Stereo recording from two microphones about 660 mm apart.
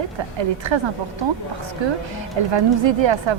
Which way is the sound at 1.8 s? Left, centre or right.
Right.